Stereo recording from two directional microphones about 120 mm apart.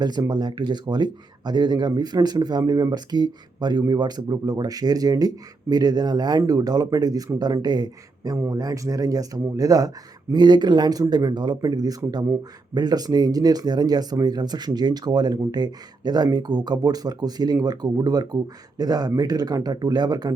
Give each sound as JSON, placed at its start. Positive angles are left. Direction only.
{"t": 0.0, "sound": "speech", "side_deg": -35}